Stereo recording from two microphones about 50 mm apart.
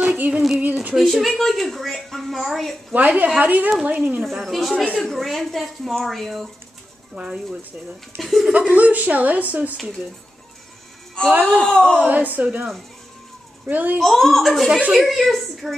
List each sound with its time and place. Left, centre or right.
0.1 s music: right
0.9 s a woman's voice: centre
2.9 s speech: right
4.2 s a woman's voice: centre
8.2 s a woman's voice: centre
8.5 s speech: right
11.3 s speech: right
11.6 s speech: centre
12.1 s speech: right
13.7 s speech: right
13.9 s a woman's voice: centre